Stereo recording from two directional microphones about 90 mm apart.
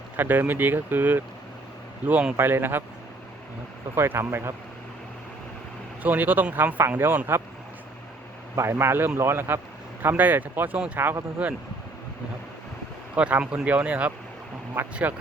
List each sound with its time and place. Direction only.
0.2 s speech: 20° right (ahead or behind)
2.3 s speech: 25° right (ahead or behind)
3.9 s speech: 25° right (ahead or behind)
6.0 s speech: 20° right (ahead or behind)
8.5 s speech: 30° right (ahead or behind)
13.1 s speech: 15° right (ahead or behind)